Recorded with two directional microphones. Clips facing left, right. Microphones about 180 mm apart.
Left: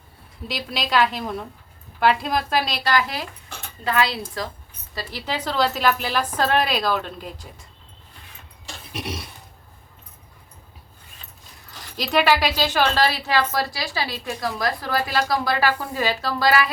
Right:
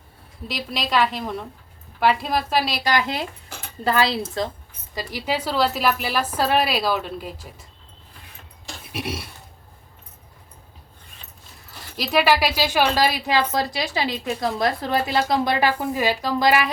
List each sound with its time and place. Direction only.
0.4 s a woman's voice: centre (ahead or behind); by 3.2 s 20° right (ahead or behind)
3.8 s speech: 30° right (ahead or behind)
4.9 s a woman's voice: 10° right (ahead or behind)
8.9 s a sound: 10° right (ahead or behind)
11.9 s speech: 5° right (ahead or behind)